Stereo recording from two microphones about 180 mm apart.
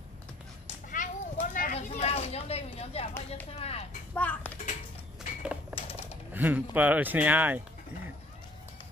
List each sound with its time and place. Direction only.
0.8 s a sound: 45° left (ahead or behind)
3.5 s speech: 35° left (ahead or behind)
4.1 s a child's voice: 10° left (ahead or behind)
5.4 s typewriter: 5° right (ahead or behind)
5.8 s typing: 35° left (ahead or behind)
6.3 s speech: 10° right (ahead or behind)